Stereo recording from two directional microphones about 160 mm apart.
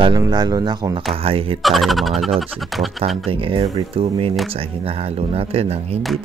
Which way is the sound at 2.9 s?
35° right (ahead or behind).